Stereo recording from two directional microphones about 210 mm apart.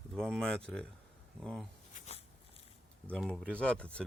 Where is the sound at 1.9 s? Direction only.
30° left (ahead or behind).